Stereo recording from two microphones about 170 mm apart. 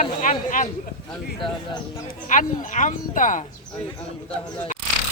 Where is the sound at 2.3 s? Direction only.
50° left (ahead or behind).